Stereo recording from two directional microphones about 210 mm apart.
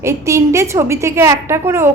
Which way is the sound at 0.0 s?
15° right (ahead or behind).